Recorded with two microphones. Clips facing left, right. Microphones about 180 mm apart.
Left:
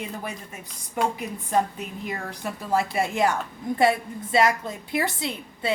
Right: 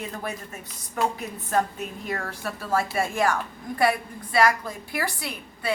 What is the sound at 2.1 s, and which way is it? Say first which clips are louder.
A woman's voice: even; 15° left (ahead or behind).